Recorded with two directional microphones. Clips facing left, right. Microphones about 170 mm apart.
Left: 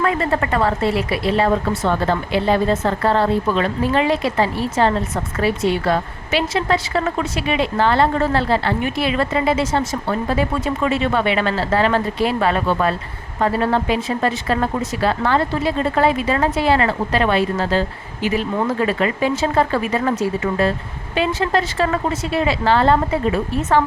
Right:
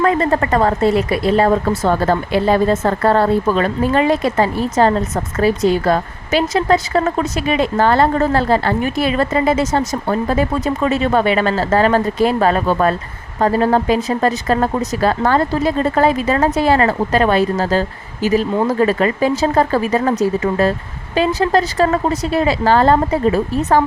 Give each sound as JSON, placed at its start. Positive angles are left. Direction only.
{"t": 0.0, "sound": "a woman's voice", "side_deg": -40}